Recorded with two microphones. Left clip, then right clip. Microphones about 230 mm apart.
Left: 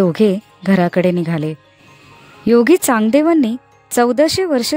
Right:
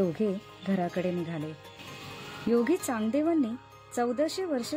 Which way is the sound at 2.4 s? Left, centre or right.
Left.